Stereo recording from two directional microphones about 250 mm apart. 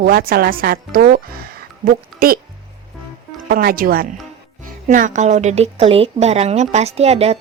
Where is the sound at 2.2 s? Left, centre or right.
Right.